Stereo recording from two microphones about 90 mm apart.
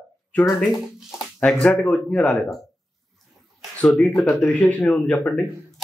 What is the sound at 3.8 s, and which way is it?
Speech, 15° left (ahead or behind).